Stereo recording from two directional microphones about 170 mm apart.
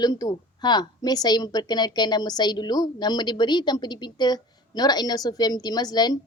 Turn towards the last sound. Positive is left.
turn(degrees=25)  # may be behind; listen again after turning